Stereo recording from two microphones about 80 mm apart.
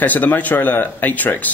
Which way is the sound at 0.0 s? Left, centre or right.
Left.